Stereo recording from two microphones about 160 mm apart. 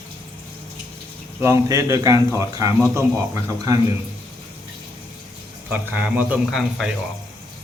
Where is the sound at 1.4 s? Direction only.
20° right (ahead or behind).